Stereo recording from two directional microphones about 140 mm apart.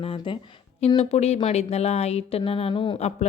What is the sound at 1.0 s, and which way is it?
Speech, 50° left (ahead or behind).